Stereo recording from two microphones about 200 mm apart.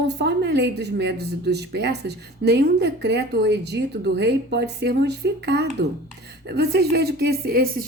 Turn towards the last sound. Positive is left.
turn(degrees=-50)  # may be behind; listen again after turning